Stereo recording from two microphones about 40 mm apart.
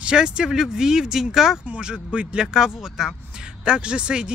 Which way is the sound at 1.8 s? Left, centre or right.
Right.